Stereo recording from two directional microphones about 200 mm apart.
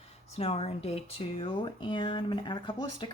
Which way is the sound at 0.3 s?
30° left (ahead or behind).